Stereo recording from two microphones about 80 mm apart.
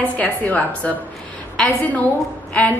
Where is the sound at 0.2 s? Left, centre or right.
Centre.